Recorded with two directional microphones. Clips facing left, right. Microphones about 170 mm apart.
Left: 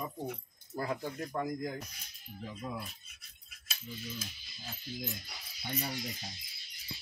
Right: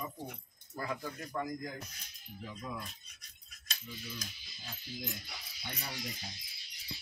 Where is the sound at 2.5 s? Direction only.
5° left (ahead or behind).